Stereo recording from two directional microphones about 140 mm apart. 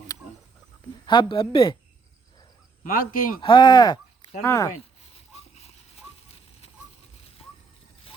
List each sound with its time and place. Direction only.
1.0 s a woman's voice: 30° left (ahead or behind)
2.8 s speech: 90° left
3.4 s speech: 35° left (ahead or behind)
5.1 s a sound: 45° left (ahead or behind)